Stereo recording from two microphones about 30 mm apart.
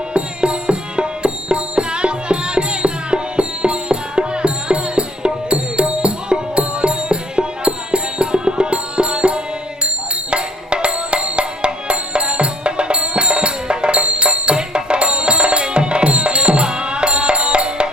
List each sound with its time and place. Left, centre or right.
0.1 s music: right